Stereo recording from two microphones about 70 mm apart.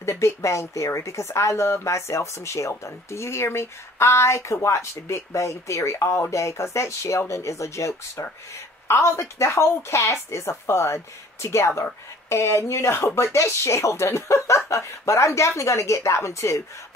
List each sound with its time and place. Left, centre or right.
0.0 s a woman's voice: left